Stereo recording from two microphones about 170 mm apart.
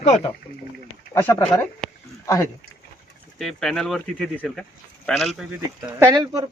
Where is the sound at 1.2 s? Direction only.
10° left (ahead or behind).